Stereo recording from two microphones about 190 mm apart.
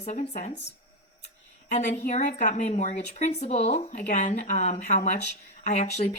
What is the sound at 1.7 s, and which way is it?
A woman's voice, 40° left (ahead or behind).